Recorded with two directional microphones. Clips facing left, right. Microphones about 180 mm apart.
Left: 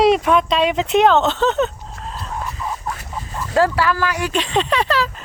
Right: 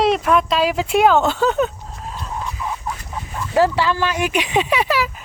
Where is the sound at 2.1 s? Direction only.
Centre (ahead or behind).